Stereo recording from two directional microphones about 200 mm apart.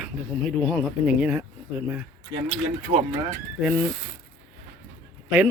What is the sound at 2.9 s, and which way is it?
Speech, 40° right (ahead or behind).